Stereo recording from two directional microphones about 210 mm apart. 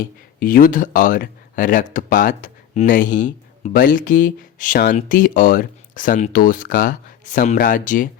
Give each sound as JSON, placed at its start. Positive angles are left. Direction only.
{"t": 0.3, "sound": "speech", "side_deg": 40}